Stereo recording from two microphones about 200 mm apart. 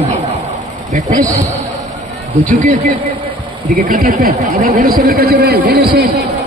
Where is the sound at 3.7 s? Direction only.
45° right (ahead or behind).